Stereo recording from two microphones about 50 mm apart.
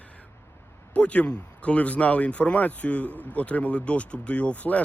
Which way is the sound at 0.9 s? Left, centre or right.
Left.